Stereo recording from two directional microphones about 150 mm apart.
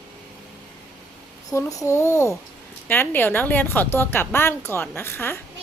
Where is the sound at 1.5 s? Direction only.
20° left (ahead or behind).